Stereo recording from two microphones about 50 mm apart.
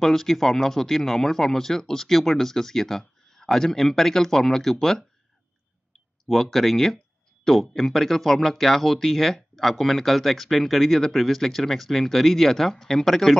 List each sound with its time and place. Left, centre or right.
0.0 s speech: centre
6.2 s speech: centre